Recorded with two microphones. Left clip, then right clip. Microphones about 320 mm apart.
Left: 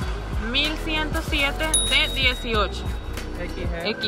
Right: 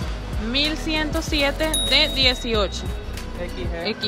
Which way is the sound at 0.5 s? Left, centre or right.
Centre.